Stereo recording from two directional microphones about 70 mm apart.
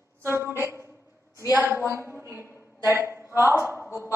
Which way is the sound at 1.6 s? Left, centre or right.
Right.